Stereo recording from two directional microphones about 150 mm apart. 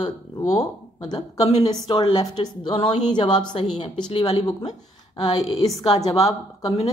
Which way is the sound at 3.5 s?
40° left (ahead or behind).